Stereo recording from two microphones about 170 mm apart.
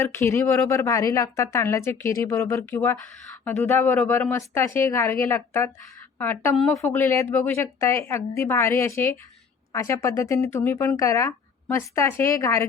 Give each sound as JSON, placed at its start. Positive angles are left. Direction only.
{"t": 0.0, "sound": "a woman's voice", "side_deg": 15}